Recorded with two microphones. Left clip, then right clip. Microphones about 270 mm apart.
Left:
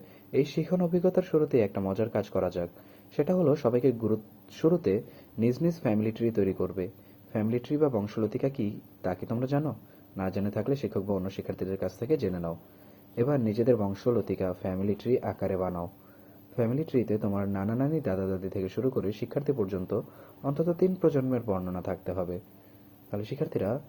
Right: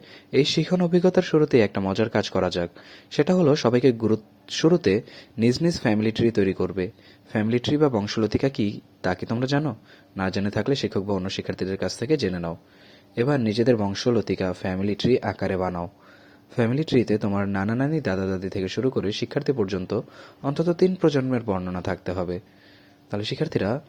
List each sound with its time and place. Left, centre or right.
0.3 s speech: right